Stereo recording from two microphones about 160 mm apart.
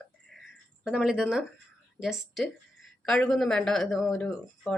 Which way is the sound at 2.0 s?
Centre (ahead or behind).